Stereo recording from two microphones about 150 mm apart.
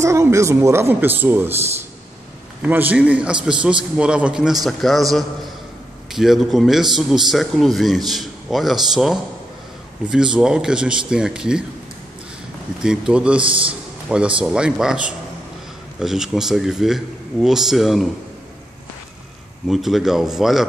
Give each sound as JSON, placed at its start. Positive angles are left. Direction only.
{"t": 0.0, "sound": "speech", "side_deg": -20}
{"t": 2.6, "sound": "speech", "side_deg": -10}
{"t": 6.1, "sound": "speech", "side_deg": 0}
{"t": 12.8, "sound": "speech", "side_deg": -5}
{"t": 13.4, "sound": "a man's voice", "side_deg": -35}
{"t": 14.0, "sound": "speech", "side_deg": -5}
{"t": 19.7, "sound": "speech", "side_deg": 0}